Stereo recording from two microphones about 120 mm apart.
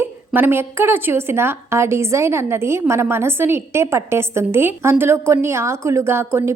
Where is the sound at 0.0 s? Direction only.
20° right (ahead or behind).